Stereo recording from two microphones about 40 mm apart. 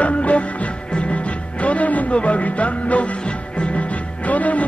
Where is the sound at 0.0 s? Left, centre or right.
Left.